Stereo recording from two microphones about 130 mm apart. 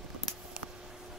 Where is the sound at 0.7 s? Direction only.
5° right (ahead or behind).